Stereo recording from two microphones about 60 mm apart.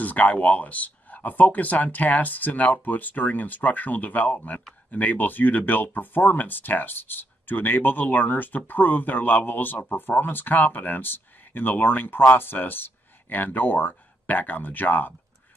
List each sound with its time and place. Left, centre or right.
0.0 s speech: left